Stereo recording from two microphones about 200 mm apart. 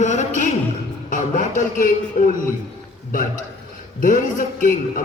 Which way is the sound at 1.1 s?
40° left (ahead or behind).